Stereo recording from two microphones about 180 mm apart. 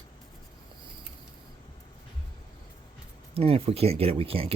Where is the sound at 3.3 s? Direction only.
35° right (ahead or behind).